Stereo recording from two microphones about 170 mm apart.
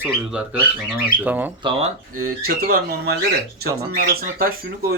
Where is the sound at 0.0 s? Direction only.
5° right (ahead or behind).